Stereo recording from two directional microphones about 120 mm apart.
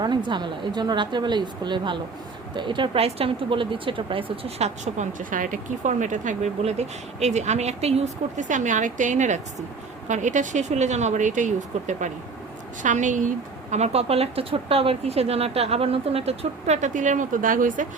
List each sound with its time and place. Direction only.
0.0 s a woman's voice: 40° right (ahead or behind); by 17.8 s 90° right